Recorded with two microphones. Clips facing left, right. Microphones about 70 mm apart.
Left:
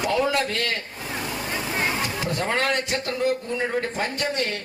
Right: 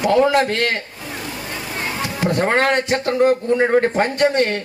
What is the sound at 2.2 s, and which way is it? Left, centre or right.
Speech, right.